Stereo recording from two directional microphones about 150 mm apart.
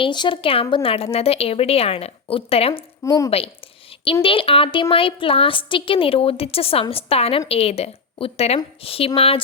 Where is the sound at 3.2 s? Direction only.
40° left (ahead or behind).